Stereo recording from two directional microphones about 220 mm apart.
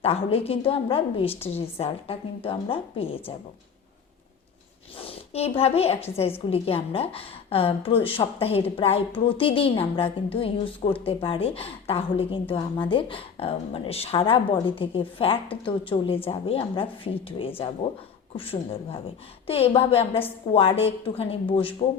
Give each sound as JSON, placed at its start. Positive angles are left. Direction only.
{"t": 0.0, "sound": "a woman's voice", "side_deg": 25}
{"t": 4.9, "sound": "a woman's voice", "side_deg": 25}